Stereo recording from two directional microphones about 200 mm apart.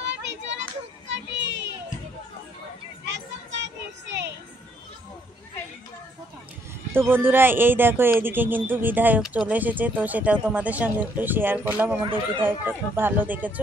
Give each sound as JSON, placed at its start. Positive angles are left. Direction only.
{"t": 1.0, "sound": "child singing", "side_deg": -65}
{"t": 3.1, "sound": "children playing", "side_deg": -60}
{"t": 6.9, "sound": "speech", "side_deg": -10}